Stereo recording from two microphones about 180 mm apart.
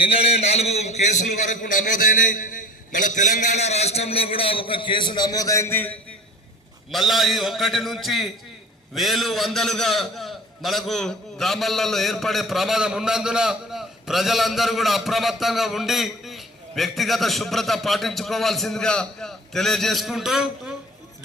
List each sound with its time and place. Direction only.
0.0 s a man's voice: 30° left (ahead or behind); by 6.0 s 10° left (ahead or behind)
6.9 s a man's voice: centre (ahead or behind)